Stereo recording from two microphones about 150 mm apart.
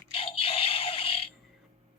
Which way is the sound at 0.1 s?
40° left (ahead or behind).